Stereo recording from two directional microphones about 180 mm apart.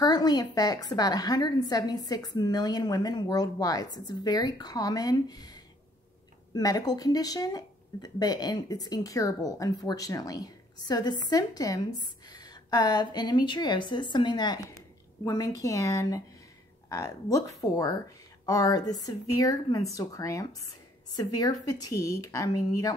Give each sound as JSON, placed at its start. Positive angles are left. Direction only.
{"t": 0.0, "sound": "speech", "side_deg": 20}